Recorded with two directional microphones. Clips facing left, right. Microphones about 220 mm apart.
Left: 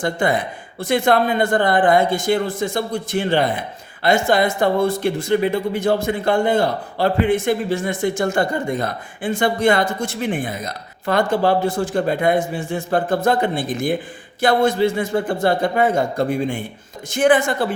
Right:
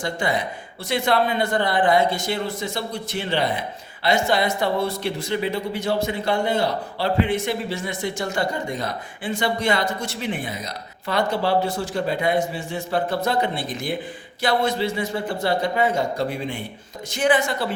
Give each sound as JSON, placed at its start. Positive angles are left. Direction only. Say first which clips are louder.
{"t": 0.0, "sound": "speech", "louder": "left 5 dB", "side_deg": 50}